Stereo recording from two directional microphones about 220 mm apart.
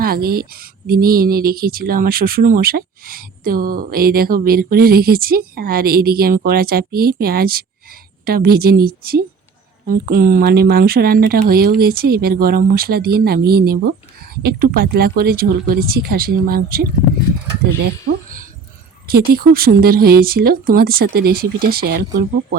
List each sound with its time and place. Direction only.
0.0 s speech: 45° right (ahead or behind)
17.8 s a sound: 45° right (ahead or behind)
19.0 s speech: 45° right (ahead or behind)